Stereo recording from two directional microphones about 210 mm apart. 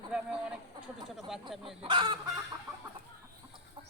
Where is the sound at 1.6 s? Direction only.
25° right (ahead or behind).